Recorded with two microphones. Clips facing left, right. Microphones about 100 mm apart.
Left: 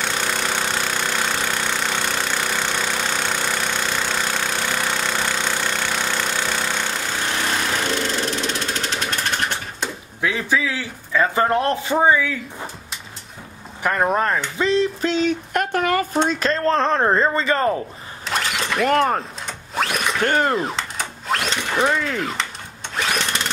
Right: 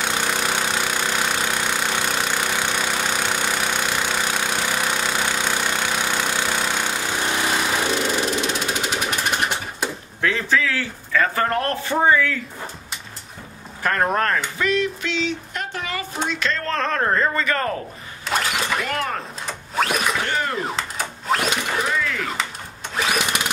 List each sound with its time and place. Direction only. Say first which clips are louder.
0.0 s a sound: right 1 dB; 10° right (ahead or behind)
10.2 s a man's voice: even; 10° left (ahead or behind)
14.0 s speech: left 2 dB; 10° left (ahead or behind)
14.6 s speech: left 6 dB; 30° left (ahead or behind); by 16.1 s 55° left (ahead or behind)
16.3 s speech: left 5 dB; 40° left (ahead or behind); by 17.7 s 25° left (ahead or behind)
18.2 s mechanisms: right 1 dB; centre (ahead or behind)
18.9 s speech: left 8 dB; 40° left (ahead or behind)
19.4 s a sound: right 1 dB; centre (ahead or behind)
20.2 s speech: left 5 dB; 45° left (ahead or behind)
20.6 s sewing machine: even; centre (ahead or behind)
22.9 s a sound: right 1 dB; 5° right (ahead or behind)